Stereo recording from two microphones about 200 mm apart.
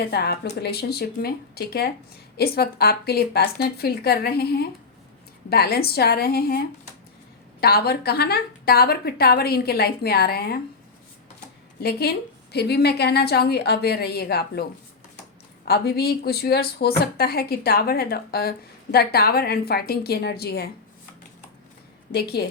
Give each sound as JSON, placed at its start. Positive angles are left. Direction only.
{"t": 0.0, "sound": "a woman's voice", "side_deg": 50}
{"t": 7.6, "sound": "a woman's voice", "side_deg": 50}
{"t": 11.8, "sound": "a woman's voice", "side_deg": 50}
{"t": 22.1, "sound": "a woman's voice", "side_deg": 50}